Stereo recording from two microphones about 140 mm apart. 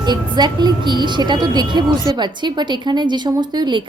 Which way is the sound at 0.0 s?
30° right (ahead or behind).